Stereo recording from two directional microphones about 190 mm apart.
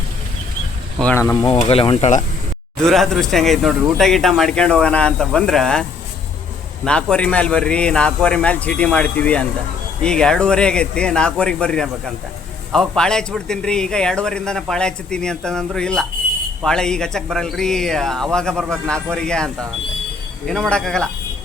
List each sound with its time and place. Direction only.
1.0 s speech: 15° left (ahead or behind)
1.5 s speech: 30° left (ahead or behind)
2.8 s a man's voice: centre (ahead or behind)
6.8 s a man's voice: 5° left (ahead or behind)